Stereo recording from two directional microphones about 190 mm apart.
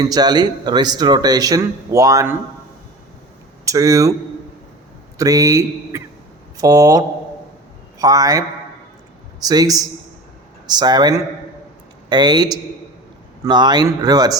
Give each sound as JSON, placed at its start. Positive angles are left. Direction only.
{"t": 0.0, "sound": "speech", "side_deg": -20}
{"t": 3.7, "sound": "a man's voice", "side_deg": -15}
{"t": 5.1, "sound": "a man's voice", "side_deg": -15}